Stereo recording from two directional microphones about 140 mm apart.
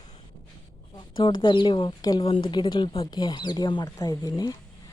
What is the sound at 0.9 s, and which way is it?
Speech, 35° left (ahead or behind).